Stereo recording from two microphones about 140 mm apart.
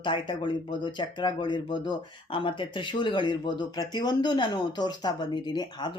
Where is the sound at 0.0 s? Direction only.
35° left (ahead or behind).